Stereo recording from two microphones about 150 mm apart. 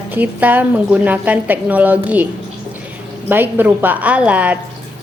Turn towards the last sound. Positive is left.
turn(degrees=-10)  # may be behind; listen again after turning